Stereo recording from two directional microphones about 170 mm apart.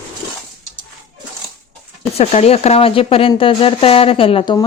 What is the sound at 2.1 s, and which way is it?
Speech, 35° left (ahead or behind).